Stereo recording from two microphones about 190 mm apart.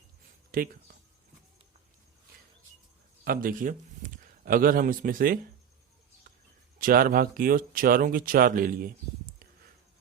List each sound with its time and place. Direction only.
0.5 s speech: 50° right (ahead or behind)
3.2 s a man's voice: 45° right (ahead or behind)
6.7 s speech: 50° right (ahead or behind)